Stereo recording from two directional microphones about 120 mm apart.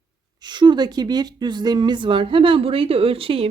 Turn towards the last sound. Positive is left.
turn(degrees=-50)  # may be behind; listen again after turning